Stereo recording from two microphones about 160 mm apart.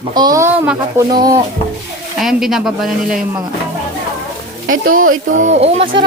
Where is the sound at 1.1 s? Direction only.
25° right (ahead or behind).